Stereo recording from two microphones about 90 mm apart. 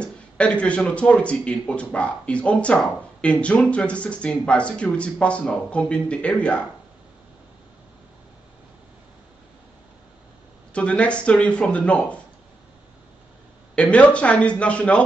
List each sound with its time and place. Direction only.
0.0 s a man's voice: 15° left (ahead or behind)
10.7 s a man's voice: 15° left (ahead or behind)
13.7 s a man's voice: 15° left (ahead or behind)